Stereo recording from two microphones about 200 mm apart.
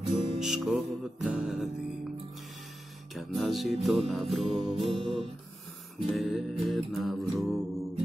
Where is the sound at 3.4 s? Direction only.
Centre (ahead or behind).